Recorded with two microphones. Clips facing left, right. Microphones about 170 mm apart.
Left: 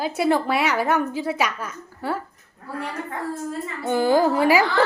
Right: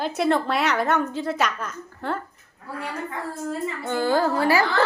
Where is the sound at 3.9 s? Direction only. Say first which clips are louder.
Left 4 dB; 15° left (ahead or behind).